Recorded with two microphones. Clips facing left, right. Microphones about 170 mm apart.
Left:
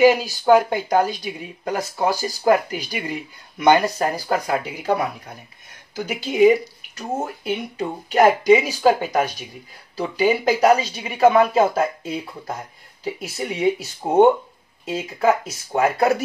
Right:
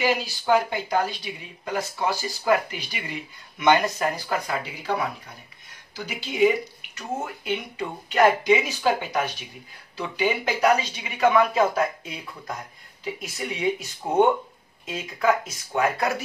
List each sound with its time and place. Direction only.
0.0 s speech: 45° left (ahead or behind)
5.9 s speech: 45° left (ahead or behind)
14.0 s speech: 35° left (ahead or behind)